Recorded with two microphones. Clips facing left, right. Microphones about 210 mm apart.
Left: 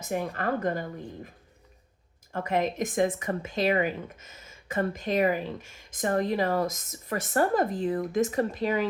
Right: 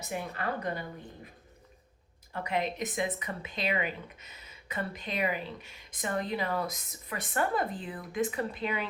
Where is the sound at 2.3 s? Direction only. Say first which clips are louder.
Left 5 dB; 45° left (ahead or behind).